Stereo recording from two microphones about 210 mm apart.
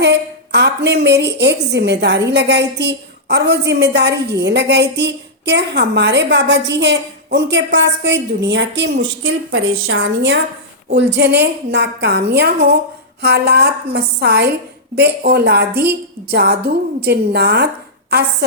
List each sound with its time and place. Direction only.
0.0 s a woman's voice: 55° right (ahead or behind)